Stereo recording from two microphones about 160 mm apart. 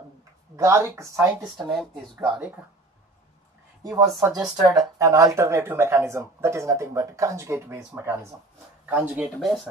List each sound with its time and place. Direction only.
0.6 s speech: 15° right (ahead or behind)
1.6 s speech: centre (ahead or behind)
4.4 s speech: 20° right (ahead or behind); by 9.6 s 5° right (ahead or behind)